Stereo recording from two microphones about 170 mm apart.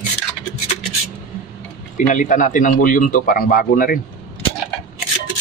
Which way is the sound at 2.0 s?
50° left (ahead or behind).